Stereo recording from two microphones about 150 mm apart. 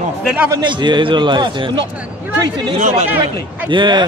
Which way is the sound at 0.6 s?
30° right (ahead or behind).